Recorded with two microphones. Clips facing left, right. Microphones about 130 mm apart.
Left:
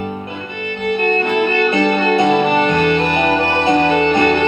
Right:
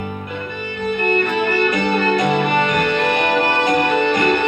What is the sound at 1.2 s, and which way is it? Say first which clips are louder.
Music: left 2 dB; 25° left (ahead or behind).